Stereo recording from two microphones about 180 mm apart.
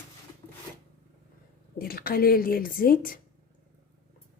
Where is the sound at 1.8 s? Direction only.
55° left (ahead or behind).